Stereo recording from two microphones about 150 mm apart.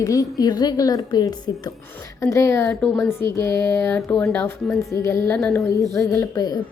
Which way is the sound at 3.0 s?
15° left (ahead or behind).